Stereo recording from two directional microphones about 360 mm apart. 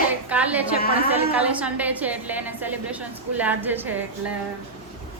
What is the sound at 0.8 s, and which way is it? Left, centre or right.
Speech, left.